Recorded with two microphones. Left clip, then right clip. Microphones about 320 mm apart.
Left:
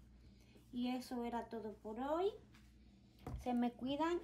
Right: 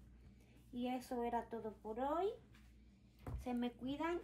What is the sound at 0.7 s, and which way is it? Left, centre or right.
Speech, centre.